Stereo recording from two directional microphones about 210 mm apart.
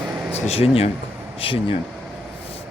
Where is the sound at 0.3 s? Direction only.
30° left (ahead or behind).